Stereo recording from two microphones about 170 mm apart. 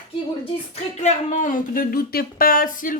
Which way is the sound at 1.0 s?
45° left (ahead or behind).